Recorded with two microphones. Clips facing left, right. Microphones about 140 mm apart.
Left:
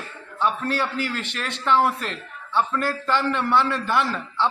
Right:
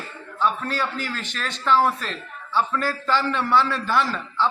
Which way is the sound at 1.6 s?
15° left (ahead or behind).